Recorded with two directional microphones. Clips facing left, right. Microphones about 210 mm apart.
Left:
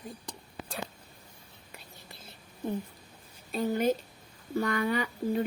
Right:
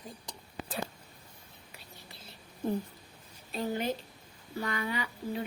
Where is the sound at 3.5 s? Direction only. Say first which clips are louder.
Left 5 dB; 45° left (ahead or behind).